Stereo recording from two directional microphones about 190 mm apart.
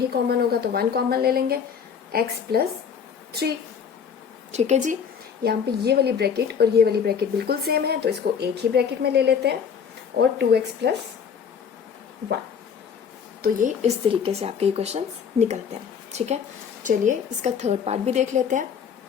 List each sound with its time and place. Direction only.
0.1 s a woman's voice: 55° right (ahead or behind)
4.5 s a woman's voice: 35° right (ahead or behind)
5.4 s a woman's voice: 60° right (ahead or behind)
13.4 s a woman's voice: 40° right (ahead or behind)
14.1 s a woman's voice: 30° right (ahead or behind)